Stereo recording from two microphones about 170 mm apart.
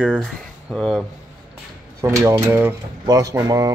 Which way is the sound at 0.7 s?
5° left (ahead or behind).